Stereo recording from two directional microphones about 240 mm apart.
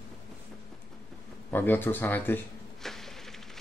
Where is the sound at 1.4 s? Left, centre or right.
Centre.